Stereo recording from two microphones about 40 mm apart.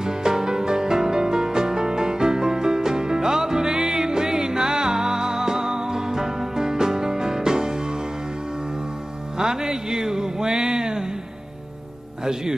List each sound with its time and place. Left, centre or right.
0.0 s music: centre
9.4 s music: centre